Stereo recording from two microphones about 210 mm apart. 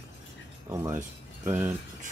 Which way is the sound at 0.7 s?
10° right (ahead or behind).